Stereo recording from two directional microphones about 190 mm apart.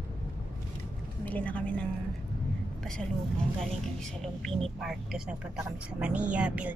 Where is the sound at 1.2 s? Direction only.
10° left (ahead or behind).